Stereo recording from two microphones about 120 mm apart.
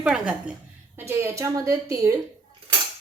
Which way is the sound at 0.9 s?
20° right (ahead or behind).